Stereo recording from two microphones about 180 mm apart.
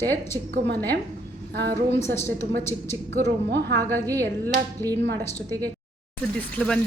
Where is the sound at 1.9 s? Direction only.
35° left (ahead or behind).